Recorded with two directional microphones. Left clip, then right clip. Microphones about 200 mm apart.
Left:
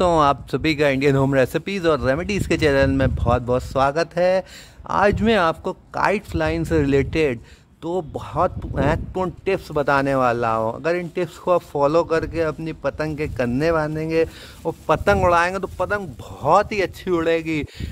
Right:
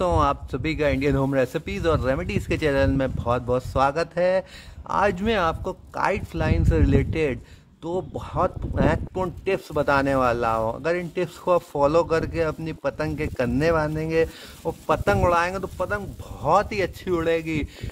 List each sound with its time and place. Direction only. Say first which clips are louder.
0.0 s a man's voice: left 5 dB; 30° left (ahead or behind)